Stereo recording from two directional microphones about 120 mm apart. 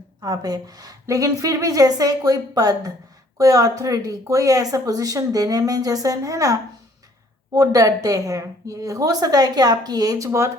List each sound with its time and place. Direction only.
0.2 s a woman's voice: 30° right (ahead or behind)